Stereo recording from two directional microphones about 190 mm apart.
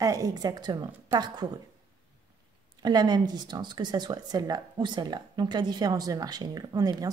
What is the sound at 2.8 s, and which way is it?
Speech, 20° right (ahead or behind).